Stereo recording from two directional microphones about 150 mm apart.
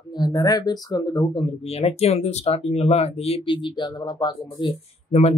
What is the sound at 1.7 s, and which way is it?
Speech, 45° left (ahead or behind).